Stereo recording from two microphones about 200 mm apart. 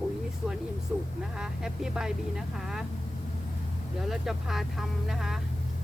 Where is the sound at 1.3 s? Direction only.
5° right (ahead or behind).